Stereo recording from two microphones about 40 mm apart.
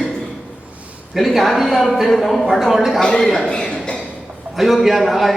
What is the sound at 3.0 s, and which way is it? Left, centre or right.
Speech, left.